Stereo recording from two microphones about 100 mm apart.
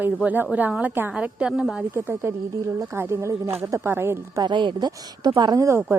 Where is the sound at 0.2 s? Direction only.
15° right (ahead or behind).